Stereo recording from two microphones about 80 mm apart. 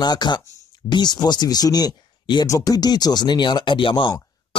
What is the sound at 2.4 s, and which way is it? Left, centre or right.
Speech, left.